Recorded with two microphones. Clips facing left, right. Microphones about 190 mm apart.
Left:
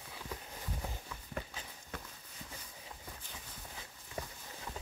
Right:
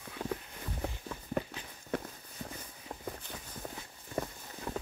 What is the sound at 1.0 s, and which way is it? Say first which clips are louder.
Walk: right 8 dB; 45° right (ahead or behind).